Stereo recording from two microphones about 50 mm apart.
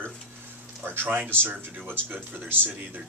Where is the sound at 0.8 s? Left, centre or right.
Right.